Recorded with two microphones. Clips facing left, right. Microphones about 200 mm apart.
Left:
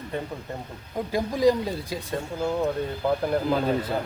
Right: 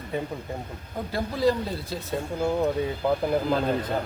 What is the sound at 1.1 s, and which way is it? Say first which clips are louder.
Speech: left 3 dB; 15° left (ahead or behind).